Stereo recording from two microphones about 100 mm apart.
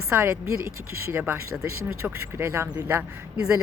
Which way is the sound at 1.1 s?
20° right (ahead or behind).